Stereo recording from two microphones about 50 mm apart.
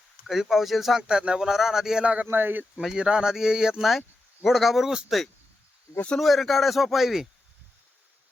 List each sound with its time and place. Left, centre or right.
0.3 s a man's voice: centre
1.0 s speech: centre
2.2 s speech: right
2.9 s speech: centre
4.4 s a man's voice: centre